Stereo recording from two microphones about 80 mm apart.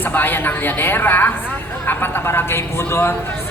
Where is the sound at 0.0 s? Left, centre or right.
Left.